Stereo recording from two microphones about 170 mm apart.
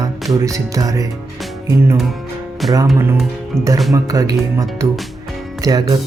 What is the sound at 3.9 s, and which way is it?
Music, 20° right (ahead or behind).